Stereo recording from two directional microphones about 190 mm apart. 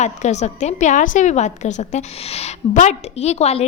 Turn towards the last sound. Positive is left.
turn(degrees=35)  # may be behind; listen again after turning